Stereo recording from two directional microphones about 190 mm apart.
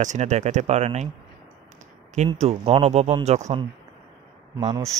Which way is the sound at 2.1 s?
35° right (ahead or behind).